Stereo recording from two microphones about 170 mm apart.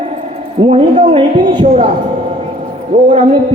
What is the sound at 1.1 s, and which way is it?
Speech, 25° right (ahead or behind).